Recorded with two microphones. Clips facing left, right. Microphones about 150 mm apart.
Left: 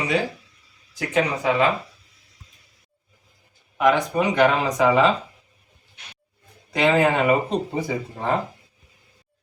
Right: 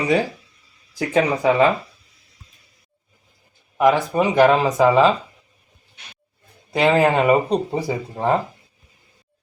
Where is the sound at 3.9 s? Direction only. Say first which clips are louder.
Even; 35° right (ahead or behind).